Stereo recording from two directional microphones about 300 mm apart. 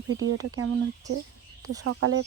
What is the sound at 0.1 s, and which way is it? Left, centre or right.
Speech, right.